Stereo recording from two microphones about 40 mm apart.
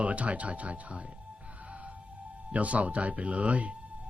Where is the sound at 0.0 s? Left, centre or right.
Right.